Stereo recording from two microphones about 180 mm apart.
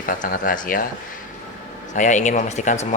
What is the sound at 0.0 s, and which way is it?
Speech, 50° left (ahead or behind).